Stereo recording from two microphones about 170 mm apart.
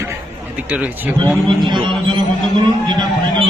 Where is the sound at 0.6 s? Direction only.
10° right (ahead or behind).